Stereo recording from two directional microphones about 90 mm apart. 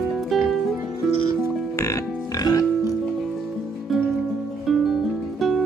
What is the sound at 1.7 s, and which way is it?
Music, 35° left (ahead or behind).